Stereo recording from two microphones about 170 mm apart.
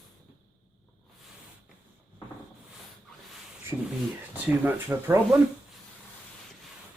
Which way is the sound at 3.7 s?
Centre (ahead or behind).